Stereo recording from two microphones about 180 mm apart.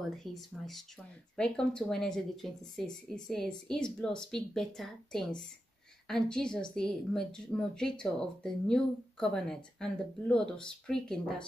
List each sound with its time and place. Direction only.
0.1 s a woman's voice: centre (ahead or behind)